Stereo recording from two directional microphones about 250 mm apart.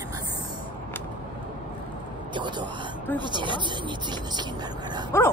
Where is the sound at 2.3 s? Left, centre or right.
Centre.